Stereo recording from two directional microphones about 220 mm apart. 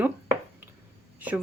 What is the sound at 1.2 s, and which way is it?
Speech, 5° right (ahead or behind).